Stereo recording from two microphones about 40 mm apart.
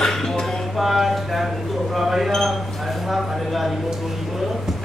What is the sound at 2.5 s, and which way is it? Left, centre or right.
Chink, centre.